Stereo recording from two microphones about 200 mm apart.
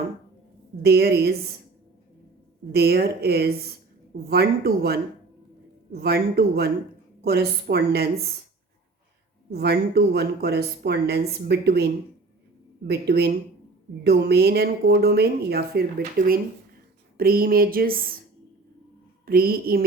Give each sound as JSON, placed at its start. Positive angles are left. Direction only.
{"t": 0.8, "sound": "speech", "side_deg": -55}
{"t": 2.7, "sound": "speech", "side_deg": -50}
{"t": 9.5, "sound": "speech", "side_deg": -50}
{"t": 12.9, "sound": "speech", "side_deg": -55}
{"t": 19.2, "sound": "speech", "side_deg": -45}